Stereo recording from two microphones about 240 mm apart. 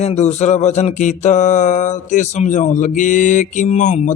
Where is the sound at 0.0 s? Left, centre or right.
Left.